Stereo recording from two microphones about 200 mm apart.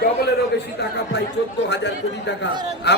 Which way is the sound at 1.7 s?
60° left (ahead or behind).